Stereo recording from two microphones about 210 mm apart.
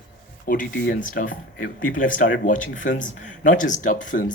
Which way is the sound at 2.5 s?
40° left (ahead or behind).